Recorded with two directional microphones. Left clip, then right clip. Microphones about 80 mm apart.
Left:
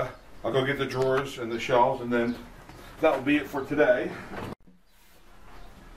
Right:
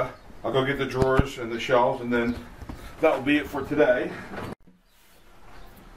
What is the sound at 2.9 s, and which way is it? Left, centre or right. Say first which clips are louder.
Speech: right 2 dB; centre.